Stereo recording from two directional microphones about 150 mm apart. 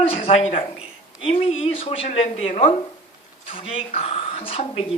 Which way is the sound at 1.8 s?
40° left (ahead or behind).